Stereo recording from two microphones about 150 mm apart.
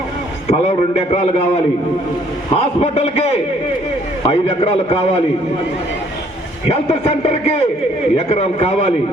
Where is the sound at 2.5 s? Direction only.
40° left (ahead or behind).